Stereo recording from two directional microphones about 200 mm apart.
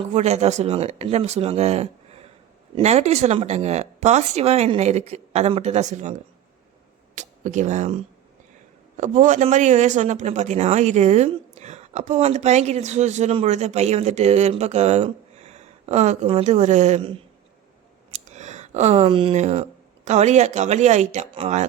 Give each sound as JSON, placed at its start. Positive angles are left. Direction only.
{"t": 0.0, "sound": "a man's voice", "side_deg": -35}
{"t": 7.2, "sound": "speech", "side_deg": -35}
{"t": 9.0, "sound": "a man's voice", "side_deg": -40}
{"t": 18.1, "sound": "a sound", "side_deg": -35}
{"t": 20.1, "sound": "a man's voice", "side_deg": -35}